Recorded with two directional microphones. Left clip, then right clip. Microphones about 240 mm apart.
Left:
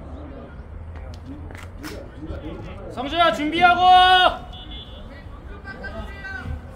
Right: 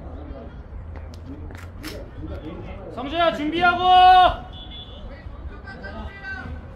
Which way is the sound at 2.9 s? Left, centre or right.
Left.